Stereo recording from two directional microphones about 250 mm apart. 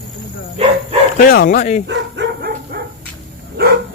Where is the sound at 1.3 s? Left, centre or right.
Left.